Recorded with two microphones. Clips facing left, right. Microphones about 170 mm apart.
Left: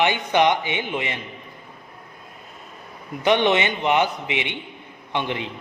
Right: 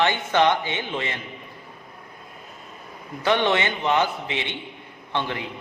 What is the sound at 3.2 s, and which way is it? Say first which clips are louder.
A man's voice: left 3 dB; 20° left (ahead or behind).